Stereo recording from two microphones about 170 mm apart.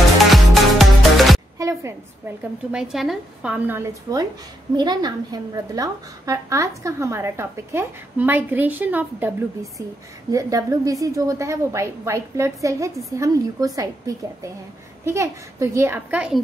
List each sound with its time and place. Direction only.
0.3 s music: centre (ahead or behind)
1.6 s a woman's voice: 15° right (ahead or behind)
2.7 s a woman's voice: 5° right (ahead or behind)